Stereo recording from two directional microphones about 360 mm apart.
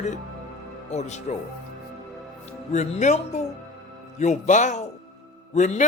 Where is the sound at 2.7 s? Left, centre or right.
Centre.